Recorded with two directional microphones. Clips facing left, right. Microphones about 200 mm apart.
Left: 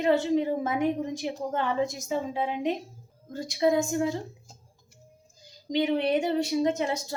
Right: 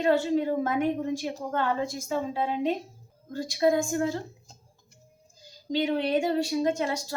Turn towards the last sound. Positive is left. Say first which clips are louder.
# left 1 dB
turn(degrees=20)  # may be behind; listen again after turning